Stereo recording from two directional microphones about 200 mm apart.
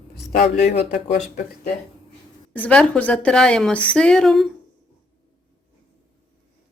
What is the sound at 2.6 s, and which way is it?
A woman's voice, 5° left (ahead or behind).